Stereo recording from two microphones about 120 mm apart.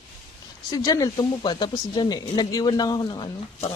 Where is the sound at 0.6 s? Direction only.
30° left (ahead or behind).